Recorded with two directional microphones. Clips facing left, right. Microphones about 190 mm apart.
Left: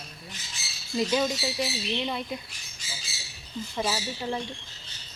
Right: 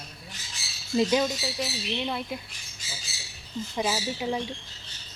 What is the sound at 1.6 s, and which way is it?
Speech, centre (ahead or behind).